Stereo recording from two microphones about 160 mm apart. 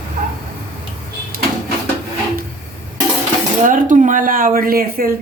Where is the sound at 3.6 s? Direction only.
55° right (ahead or behind).